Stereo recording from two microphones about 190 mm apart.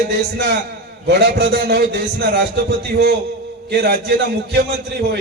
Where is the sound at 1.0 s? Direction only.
60° right (ahead or behind).